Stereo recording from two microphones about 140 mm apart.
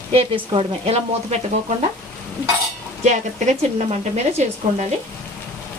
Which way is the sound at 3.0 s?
55° right (ahead or behind).